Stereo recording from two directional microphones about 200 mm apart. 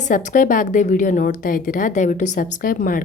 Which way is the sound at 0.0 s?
40° left (ahead or behind).